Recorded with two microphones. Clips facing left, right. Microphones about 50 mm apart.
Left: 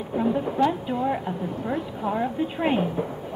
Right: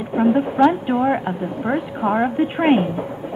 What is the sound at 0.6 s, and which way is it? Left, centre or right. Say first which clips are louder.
A woman's voice: right 7 dB; right.